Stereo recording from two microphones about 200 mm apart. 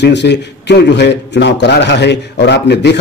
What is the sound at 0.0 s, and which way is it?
A man's voice, 60° left (ahead or behind).